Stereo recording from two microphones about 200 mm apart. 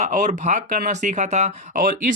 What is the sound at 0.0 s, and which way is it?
Speech, 35° right (ahead or behind).